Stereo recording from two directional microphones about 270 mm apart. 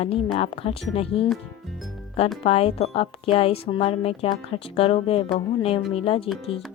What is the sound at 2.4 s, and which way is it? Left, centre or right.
Speech, left.